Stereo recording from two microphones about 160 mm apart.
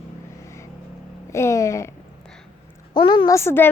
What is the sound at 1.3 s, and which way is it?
Speech, 20° left (ahead or behind).